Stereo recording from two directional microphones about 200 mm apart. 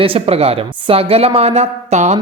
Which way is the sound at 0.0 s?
30° right (ahead or behind).